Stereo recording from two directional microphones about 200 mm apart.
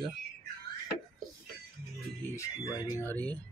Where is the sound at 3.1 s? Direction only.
10° left (ahead or behind).